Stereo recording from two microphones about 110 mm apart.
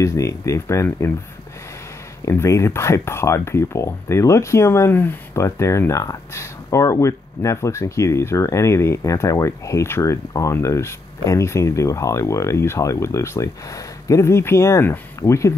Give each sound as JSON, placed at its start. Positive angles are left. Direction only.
{"t": 0.0, "sound": "speech", "side_deg": 30}
{"t": 2.2, "sound": "speech", "side_deg": 25}